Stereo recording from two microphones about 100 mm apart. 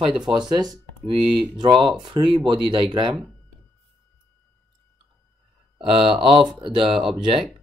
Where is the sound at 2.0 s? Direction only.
55° right (ahead or behind).